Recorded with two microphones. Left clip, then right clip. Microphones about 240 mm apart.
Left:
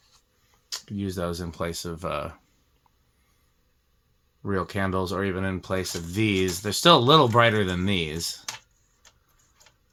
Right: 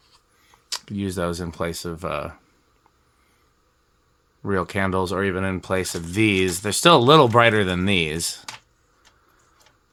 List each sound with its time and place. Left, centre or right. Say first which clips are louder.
0.7 s speech: right 4 dB; right
4.4 s speech: right 4 dB; right